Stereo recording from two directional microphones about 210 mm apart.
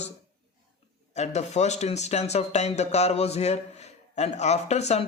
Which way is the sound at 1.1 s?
30° left (ahead or behind).